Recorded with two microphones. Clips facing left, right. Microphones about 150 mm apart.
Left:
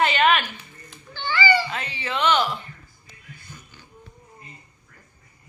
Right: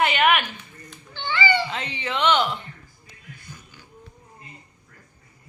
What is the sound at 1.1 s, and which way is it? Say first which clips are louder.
Cat: left 1 dB; 20° right (ahead or behind).